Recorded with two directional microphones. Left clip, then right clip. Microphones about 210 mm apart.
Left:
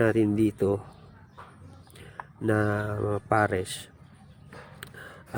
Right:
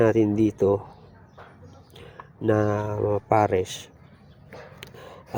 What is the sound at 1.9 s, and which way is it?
Speech, 10° left (ahead or behind).